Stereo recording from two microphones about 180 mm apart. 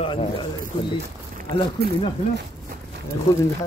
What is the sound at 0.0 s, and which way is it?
Speech, 30° left (ahead or behind).